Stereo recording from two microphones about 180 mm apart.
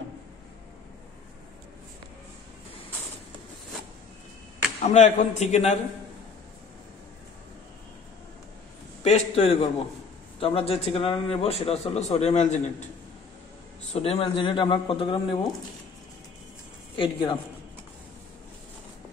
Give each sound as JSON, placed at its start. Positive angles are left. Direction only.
{"t": 4.8, "sound": "a man's voice", "side_deg": 40}
{"t": 9.0, "sound": "a man's voice", "side_deg": 35}
{"t": 13.9, "sound": "speech", "side_deg": 35}
{"t": 16.9, "sound": "speech", "side_deg": 30}